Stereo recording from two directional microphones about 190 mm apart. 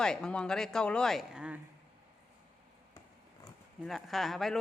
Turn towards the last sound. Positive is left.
turn(degrees=0)  # may be behind; listen again after turning